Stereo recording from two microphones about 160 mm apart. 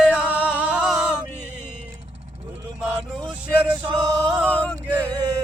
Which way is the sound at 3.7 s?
25° right (ahead or behind).